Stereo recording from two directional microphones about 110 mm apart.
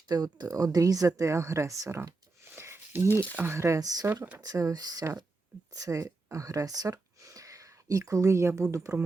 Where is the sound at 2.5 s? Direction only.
20° right (ahead or behind).